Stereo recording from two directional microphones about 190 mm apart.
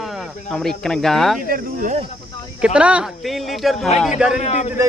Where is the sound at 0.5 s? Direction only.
5° left (ahead or behind).